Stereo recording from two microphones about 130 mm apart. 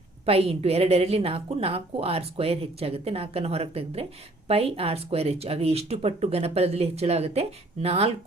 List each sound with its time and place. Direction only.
0.3 s a woman's voice: 50° right (ahead or behind)